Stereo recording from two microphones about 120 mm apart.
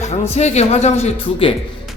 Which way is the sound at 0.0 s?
65° left (ahead or behind).